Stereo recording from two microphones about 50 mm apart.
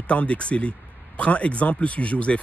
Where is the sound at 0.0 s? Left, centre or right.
Left.